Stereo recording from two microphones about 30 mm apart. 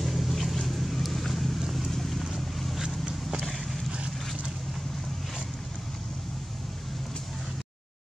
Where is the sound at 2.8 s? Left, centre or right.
Right.